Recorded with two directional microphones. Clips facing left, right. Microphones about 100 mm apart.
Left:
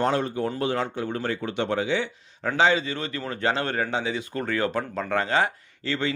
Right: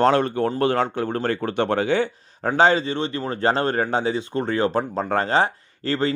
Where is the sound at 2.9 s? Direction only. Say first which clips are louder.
Right 6 dB; 30° right (ahead or behind).